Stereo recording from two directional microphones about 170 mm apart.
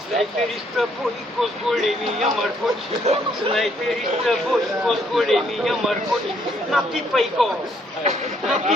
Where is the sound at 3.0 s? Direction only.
35° right (ahead or behind).